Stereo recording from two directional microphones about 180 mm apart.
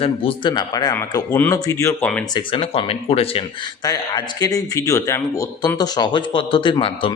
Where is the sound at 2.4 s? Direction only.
30° left (ahead or behind).